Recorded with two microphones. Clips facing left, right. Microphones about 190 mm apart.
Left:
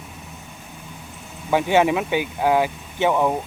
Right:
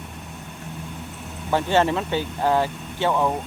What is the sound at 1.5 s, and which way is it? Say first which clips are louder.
Speech: left 2 dB; 10° left (ahead or behind).